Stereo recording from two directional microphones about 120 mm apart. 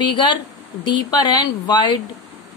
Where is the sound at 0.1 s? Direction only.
35° left (ahead or behind).